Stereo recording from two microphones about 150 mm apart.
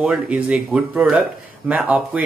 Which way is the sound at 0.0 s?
5° right (ahead or behind).